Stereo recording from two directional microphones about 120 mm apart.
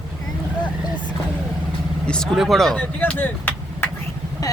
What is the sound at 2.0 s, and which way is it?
Speech, 5° left (ahead or behind).